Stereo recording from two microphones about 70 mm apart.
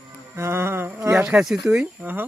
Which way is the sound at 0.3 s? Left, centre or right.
Right.